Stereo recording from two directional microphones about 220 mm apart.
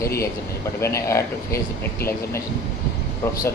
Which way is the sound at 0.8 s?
10° left (ahead or behind).